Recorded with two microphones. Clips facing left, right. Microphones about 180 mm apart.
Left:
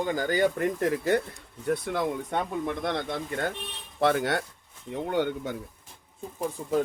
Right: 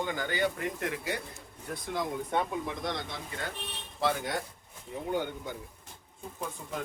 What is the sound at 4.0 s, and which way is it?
Speech, 65° left (ahead or behind).